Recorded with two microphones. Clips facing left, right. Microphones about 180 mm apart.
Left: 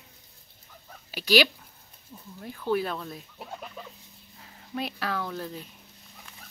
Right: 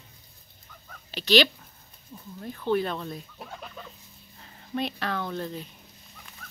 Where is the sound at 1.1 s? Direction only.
10° left (ahead or behind).